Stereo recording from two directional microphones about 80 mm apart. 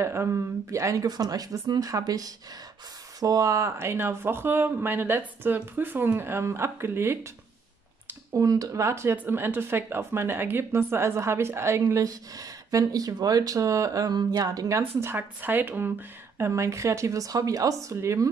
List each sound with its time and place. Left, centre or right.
0.0 s speech: right
1.0 s speech: right
8.3 s speech: right
9.1 s speech: right
12.0 s speech: right
14.8 s speech: right
16.3 s speech: right